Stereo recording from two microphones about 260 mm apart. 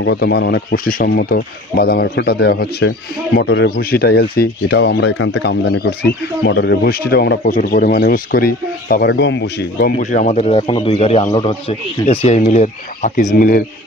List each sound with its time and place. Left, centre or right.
0.0 s speech: left